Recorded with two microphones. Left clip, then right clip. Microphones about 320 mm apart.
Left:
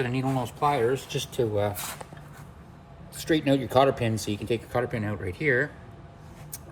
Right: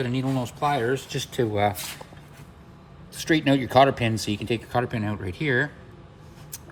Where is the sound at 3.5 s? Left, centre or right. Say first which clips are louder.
Right 3 dB; right.